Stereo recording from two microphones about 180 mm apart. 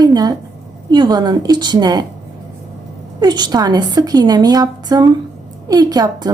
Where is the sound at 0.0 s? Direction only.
20° right (ahead or behind).